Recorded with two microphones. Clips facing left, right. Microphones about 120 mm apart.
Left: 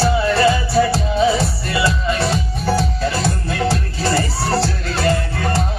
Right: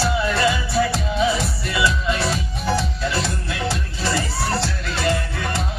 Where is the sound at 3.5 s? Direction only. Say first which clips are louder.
Left 6 dB; 40° left (ahead or behind).